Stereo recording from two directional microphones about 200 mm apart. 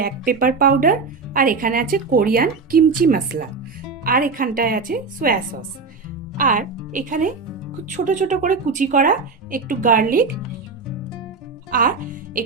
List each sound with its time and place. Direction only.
0.0 s speech: 45° right (ahead or behind)
11.7 s speech: 45° right (ahead or behind)